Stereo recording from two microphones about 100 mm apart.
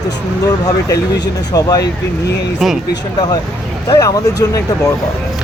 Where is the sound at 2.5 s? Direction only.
5° right (ahead or behind).